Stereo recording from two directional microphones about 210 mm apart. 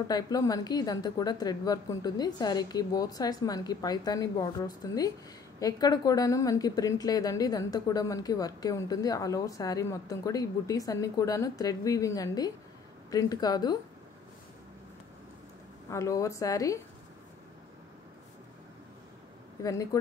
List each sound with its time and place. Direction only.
0.1 s a woman's voice: 20° left (ahead or behind)
15.9 s a woman's voice: 15° left (ahead or behind)
19.6 s a woman's voice: 15° left (ahead or behind)